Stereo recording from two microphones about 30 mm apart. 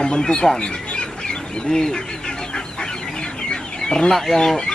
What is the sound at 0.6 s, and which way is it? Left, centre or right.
Squawk, left.